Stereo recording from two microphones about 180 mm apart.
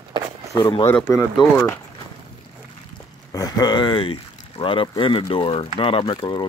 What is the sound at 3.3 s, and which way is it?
Speech, 20° left (ahead or behind).